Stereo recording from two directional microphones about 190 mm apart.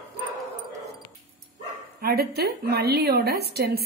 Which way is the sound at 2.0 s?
55° right (ahead or behind).